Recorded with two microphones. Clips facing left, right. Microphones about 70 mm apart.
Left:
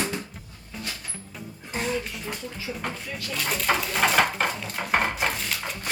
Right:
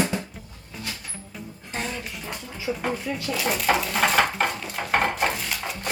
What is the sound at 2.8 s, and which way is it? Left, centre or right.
Speech, centre.